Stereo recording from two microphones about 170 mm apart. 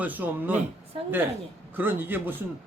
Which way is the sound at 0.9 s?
35° right (ahead or behind).